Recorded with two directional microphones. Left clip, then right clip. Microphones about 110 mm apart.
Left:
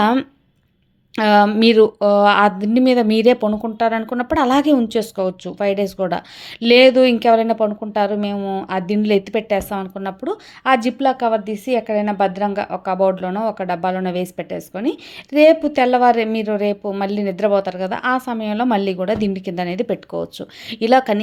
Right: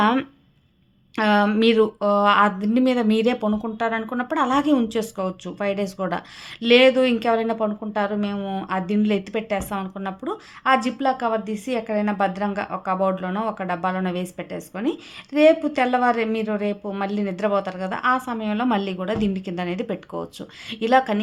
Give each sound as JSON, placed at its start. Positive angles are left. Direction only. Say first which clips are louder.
{"t": 1.1, "sound": "a woman's voice", "louder": "left 6 dB", "side_deg": 45}
{"t": 8.4, "sound": "speech", "louder": "left 5 dB", "side_deg": 25}
{"t": 8.7, "sound": "a woman's voice", "louder": "left 5 dB", "side_deg": 40}